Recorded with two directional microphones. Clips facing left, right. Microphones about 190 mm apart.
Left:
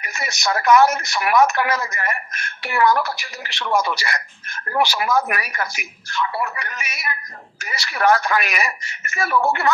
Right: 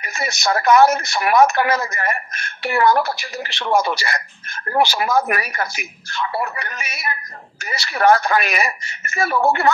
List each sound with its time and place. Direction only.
0.0 s speech: 30° right (ahead or behind)